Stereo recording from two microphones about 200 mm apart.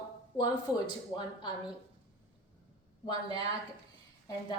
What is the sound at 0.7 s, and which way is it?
Speech, 5° right (ahead or behind).